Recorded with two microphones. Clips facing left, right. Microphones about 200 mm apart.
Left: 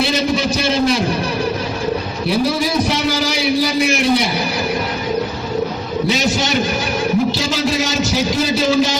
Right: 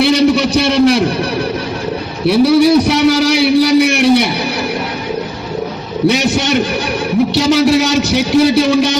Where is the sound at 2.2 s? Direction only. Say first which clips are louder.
Right 10 dB; 65° right (ahead or behind).